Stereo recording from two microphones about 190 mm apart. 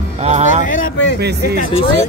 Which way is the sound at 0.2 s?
35° right (ahead or behind).